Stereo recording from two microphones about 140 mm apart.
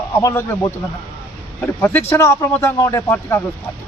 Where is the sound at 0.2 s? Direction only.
20° left (ahead or behind).